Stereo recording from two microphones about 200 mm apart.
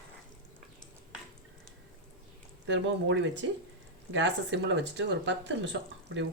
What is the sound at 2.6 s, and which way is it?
Speech, 65° right (ahead or behind).